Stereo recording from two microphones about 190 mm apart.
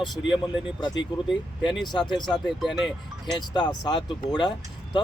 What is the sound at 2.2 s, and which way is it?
Speech, centre (ahead or behind).